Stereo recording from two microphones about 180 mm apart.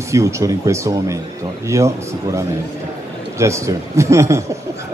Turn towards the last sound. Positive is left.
turn(degrees=-15)  # may be behind; listen again after turning